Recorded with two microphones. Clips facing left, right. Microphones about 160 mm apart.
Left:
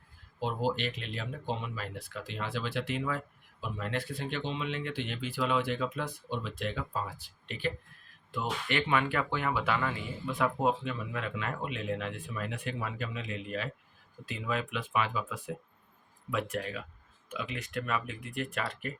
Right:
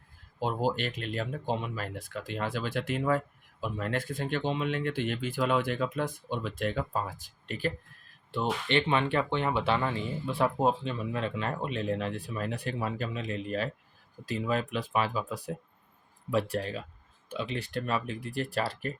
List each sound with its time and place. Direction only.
0.3 s speech: 45° right (ahead or behind)
8.3 s speech: 30° right (ahead or behind)